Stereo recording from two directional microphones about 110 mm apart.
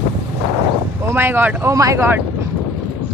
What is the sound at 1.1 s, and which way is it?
Speech, 20° right (ahead or behind).